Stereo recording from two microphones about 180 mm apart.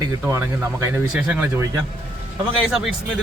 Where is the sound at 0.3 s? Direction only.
15° right (ahead or behind).